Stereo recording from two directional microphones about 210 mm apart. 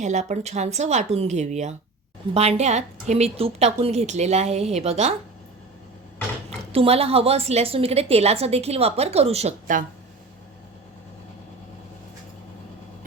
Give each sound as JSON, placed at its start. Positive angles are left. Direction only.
{"t": 0.0, "sound": "a woman's voice", "side_deg": -35}
{"t": 6.7, "sound": "a woman's voice", "side_deg": -30}